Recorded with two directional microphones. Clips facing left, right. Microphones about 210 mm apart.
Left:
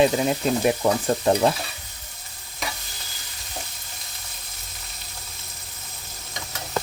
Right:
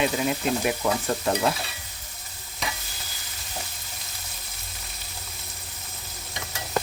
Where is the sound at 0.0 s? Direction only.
30° left (ahead or behind).